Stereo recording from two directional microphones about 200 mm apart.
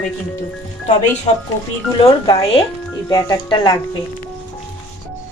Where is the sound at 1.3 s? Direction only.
30° left (ahead or behind).